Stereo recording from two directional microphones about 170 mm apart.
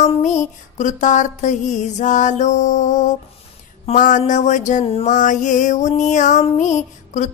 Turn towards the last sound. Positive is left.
turn(degrees=45)  # may be behind; listen again after turning